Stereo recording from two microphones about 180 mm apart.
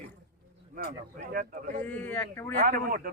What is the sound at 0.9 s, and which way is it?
Speech, 50° right (ahead or behind).